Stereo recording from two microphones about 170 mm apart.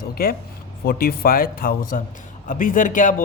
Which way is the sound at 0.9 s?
60° left (ahead or behind).